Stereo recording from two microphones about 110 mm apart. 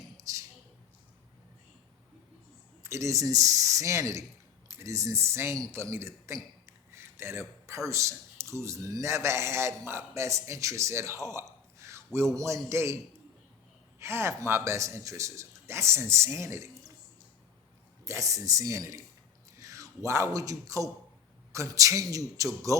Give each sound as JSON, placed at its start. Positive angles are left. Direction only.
{"t": 0.2, "sound": "a sound", "side_deg": -30}
{"t": 2.8, "sound": "a man's voice", "side_deg": -25}
{"t": 14.0, "sound": "a man's voice", "side_deg": -25}
{"t": 18.0, "sound": "a man's voice", "side_deg": -30}